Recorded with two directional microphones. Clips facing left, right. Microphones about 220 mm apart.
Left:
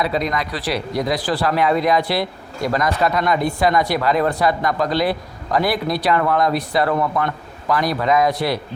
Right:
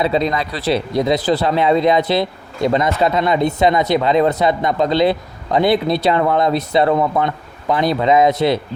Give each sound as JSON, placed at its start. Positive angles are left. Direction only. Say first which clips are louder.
{"t": 0.0, "sound": "a man's voice", "louder": "right 4 dB", "side_deg": -25}